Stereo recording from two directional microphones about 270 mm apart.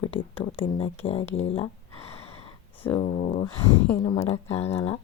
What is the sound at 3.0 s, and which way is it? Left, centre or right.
Speech, left.